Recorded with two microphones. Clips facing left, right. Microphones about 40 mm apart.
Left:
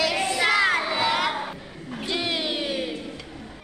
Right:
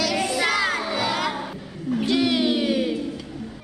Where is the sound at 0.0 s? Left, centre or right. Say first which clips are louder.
Even; left.